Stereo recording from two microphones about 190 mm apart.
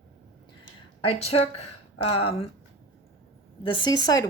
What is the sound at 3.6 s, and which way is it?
Speech, 25° left (ahead or behind).